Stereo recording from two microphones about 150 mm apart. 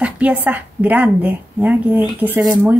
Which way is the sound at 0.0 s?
10° right (ahead or behind).